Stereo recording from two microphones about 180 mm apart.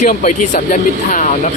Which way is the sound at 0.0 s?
40° left (ahead or behind).